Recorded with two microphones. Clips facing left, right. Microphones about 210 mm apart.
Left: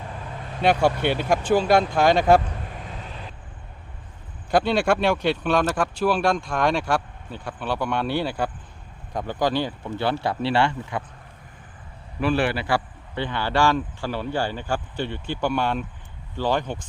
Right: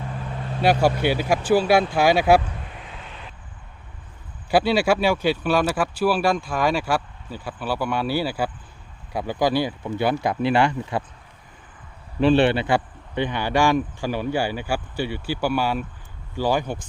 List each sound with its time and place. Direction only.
0.6 s speech: 5° right (ahead or behind)
4.5 s speech: 5° right (ahead or behind)
12.2 s speech: 25° right (ahead or behind); by 16.8 s 10° right (ahead or behind)